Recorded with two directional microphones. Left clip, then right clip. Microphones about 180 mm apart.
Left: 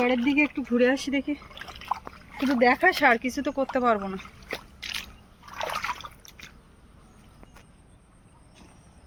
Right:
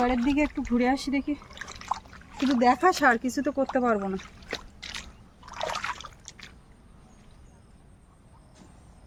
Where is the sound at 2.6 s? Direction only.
80° right.